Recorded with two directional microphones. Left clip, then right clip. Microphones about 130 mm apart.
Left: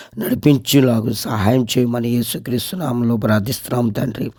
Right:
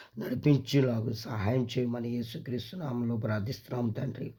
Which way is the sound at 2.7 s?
90° left.